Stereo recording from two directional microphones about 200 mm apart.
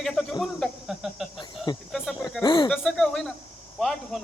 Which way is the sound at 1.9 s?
Centre (ahead or behind).